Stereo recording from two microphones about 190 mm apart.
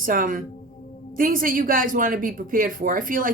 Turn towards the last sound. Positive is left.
turn(degrees=-45)  # may be behind; listen again after turning